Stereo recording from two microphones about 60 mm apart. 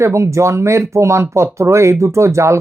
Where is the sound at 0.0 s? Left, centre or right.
Right.